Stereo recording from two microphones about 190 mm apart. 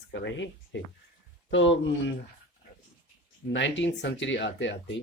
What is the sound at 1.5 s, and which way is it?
Speech, 80° left.